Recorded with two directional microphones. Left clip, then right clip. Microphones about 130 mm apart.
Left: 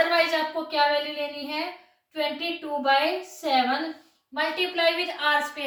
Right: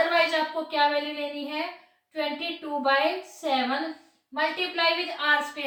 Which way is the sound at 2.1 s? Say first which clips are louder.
Left 2 dB; 15° right (ahead or behind).